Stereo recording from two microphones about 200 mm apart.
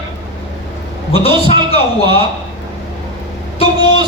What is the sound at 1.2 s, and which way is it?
A man's voice, 30° left (ahead or behind).